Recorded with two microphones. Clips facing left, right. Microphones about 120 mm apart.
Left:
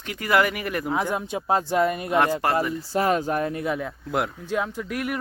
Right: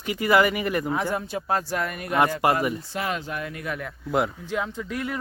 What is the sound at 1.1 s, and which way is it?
Speech, 15° left (ahead or behind).